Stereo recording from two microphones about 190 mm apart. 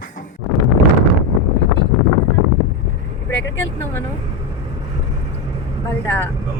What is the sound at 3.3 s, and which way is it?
Vehicle, 75° left (ahead or behind).